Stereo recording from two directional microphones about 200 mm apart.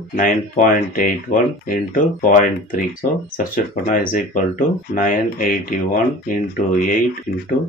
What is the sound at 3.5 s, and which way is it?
Speech, 45° left (ahead or behind).